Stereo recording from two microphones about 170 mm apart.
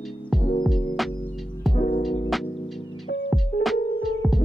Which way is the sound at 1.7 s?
35° left (ahead or behind).